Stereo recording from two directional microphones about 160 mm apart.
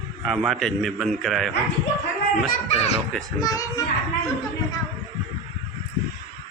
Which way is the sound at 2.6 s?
40° left (ahead or behind).